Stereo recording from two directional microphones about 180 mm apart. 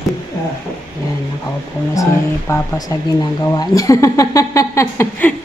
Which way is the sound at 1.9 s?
20° left (ahead or behind).